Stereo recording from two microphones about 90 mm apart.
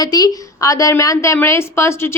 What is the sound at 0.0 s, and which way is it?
Speech, 45° left (ahead or behind).